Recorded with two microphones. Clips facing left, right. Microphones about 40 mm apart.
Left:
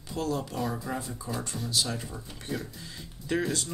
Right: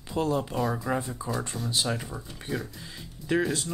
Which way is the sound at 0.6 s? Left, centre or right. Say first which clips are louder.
Right 4 dB; centre.